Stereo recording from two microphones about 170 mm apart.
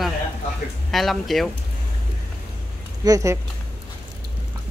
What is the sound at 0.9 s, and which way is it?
Speech, centre (ahead or behind).